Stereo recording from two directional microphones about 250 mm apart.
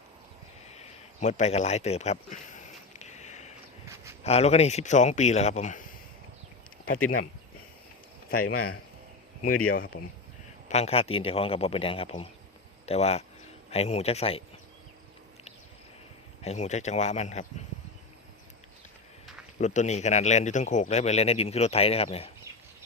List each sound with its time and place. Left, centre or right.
0.7 s a sound: left
4.2 s speech: left
7.0 s a man's voice: left
8.4 s a man's voice: left
9.7 s speech: left
10.7 s speech: left
16.4 s speech: left
19.5 s speech: left